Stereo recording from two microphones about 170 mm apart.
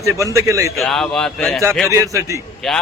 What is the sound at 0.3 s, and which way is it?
Speech, 15° right (ahead or behind).